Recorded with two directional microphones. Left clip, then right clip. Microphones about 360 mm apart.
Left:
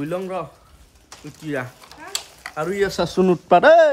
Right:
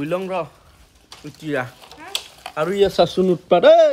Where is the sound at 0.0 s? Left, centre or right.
Centre.